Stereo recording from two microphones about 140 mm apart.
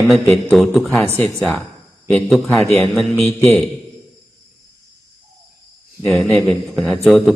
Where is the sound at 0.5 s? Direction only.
Centre (ahead or behind).